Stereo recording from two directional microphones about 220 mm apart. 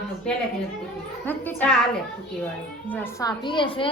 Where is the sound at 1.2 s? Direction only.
10° left (ahead or behind).